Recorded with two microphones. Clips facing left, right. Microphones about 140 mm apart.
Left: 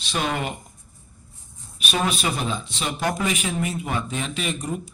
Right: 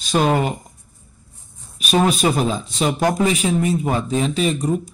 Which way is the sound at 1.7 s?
40° right (ahead or behind).